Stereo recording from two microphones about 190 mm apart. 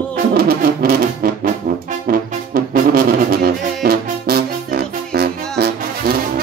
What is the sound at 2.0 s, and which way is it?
Music, 50° right (ahead or behind).